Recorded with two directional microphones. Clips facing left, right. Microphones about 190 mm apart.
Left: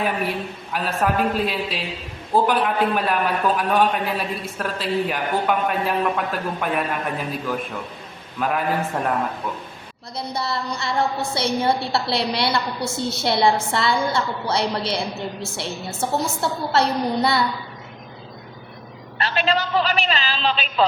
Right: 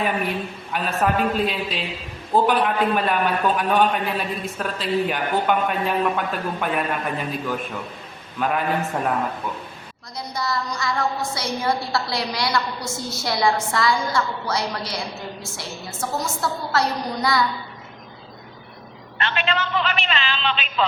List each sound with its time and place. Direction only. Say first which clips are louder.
0.7 s a man's voice: even; centre (ahead or behind)
10.2 s a woman's voice: left 1 dB; 30° left (ahead or behind)
19.2 s a man's voice: left 3 dB; 35° left (ahead or behind)